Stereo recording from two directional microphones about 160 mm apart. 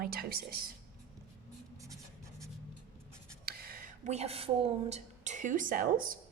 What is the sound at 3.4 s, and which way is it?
A woman's voice, 65° right (ahead or behind).